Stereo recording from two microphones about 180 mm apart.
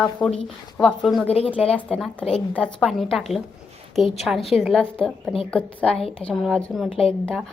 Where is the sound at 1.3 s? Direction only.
35° left (ahead or behind).